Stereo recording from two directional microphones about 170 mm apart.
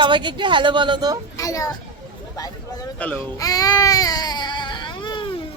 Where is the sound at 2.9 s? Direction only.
10° left (ahead or behind).